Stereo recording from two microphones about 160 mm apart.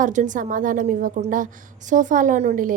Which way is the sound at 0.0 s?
50° right (ahead or behind).